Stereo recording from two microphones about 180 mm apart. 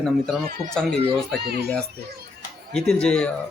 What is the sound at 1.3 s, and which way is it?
Speech, 65° right (ahead or behind).